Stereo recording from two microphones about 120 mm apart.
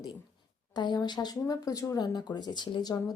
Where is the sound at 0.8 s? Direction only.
35° left (ahead or behind).